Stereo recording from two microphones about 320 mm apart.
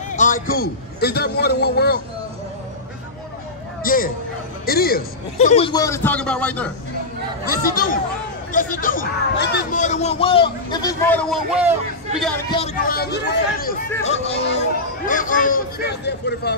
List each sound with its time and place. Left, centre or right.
0.1 s a man's voice: left
3.8 s a man's voice: left; by 6.7 s centre
7.4 s speech: left; by 11.7 s centre
12.4 s speech: centre
14.0 s speech: centre